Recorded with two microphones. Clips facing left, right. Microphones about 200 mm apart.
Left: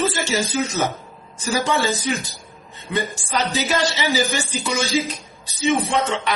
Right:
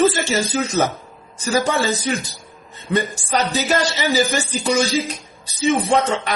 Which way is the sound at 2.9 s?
45° right (ahead or behind).